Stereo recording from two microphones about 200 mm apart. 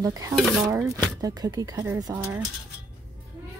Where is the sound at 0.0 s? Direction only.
15° right (ahead or behind).